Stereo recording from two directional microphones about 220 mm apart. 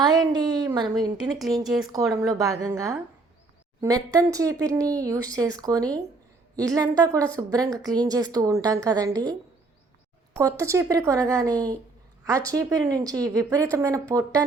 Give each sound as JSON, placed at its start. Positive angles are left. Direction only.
{"t": 0.0, "sound": "a woman's voice", "side_deg": -20}
{"t": 1.2, "sound": "speech", "side_deg": 0}
{"t": 1.9, "sound": "speech", "side_deg": -15}
{"t": 10.3, "sound": "speech", "side_deg": -15}